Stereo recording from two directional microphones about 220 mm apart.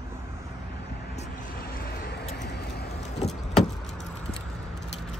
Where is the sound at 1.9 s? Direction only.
50° left (ahead or behind).